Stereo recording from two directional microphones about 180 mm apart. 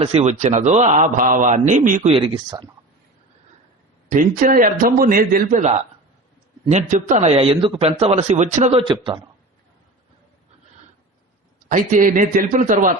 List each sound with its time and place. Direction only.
0.0 s a man's voice: 35° right (ahead or behind)
2.1 s speech: 25° right (ahead or behind)
4.1 s a man's voice: 45° right (ahead or behind)
7.3 s a man's voice: 30° right (ahead or behind)
8.8 s speech: 25° right (ahead or behind)
11.7 s a man's voice: 50° right (ahead or behind)